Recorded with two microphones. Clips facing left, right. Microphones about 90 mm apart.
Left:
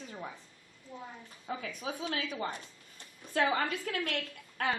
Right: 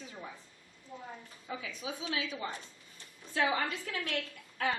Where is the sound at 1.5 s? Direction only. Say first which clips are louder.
Left 2 dB; 50° left (ahead or behind).